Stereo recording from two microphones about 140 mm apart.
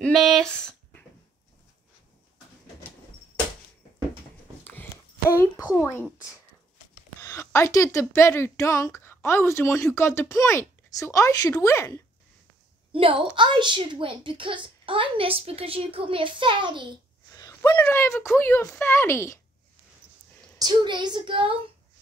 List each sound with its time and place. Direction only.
0.0 s a sound: centre (ahead or behind)
7.2 s a woman's voice: 20° left (ahead or behind)
12.9 s a woman's voice: 40° right (ahead or behind)
17.3 s a sound: 25° left (ahead or behind)
17.6 s speech: 10° left (ahead or behind)
20.5 s a woman's voice: 30° right (ahead or behind)